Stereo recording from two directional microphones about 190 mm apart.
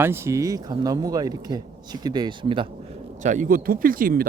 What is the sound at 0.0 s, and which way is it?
Speech, 15° right (ahead or behind).